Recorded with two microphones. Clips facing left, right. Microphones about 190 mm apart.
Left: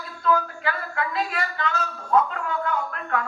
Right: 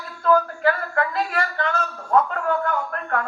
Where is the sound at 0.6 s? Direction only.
50° right (ahead or behind).